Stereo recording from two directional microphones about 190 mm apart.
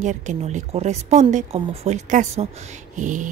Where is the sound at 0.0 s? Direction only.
40° right (ahead or behind).